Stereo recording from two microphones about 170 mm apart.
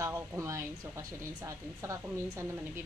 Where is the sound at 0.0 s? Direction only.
10° right (ahead or behind).